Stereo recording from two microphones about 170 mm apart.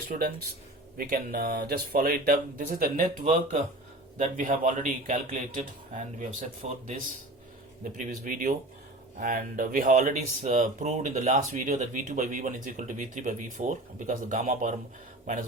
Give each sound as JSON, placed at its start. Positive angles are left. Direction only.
{"t": 0.1, "sound": "speech", "side_deg": -55}